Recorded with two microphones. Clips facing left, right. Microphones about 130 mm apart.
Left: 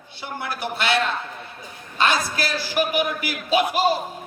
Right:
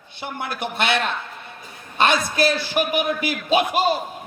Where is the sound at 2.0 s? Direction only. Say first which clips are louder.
Right 3 dB; 25° right (ahead or behind).